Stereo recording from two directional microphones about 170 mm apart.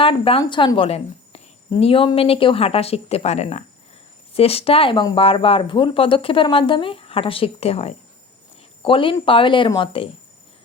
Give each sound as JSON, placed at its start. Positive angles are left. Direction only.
{"t": 0.0, "sound": "a woman's voice", "side_deg": 30}